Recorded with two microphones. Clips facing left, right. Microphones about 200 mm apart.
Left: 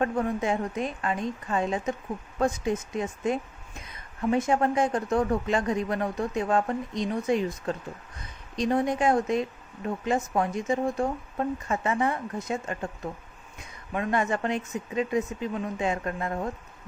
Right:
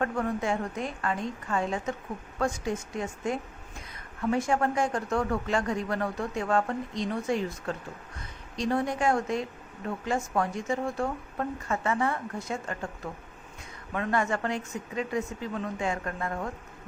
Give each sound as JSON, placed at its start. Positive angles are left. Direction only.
{"t": 0.0, "sound": "a woman's voice", "side_deg": 20}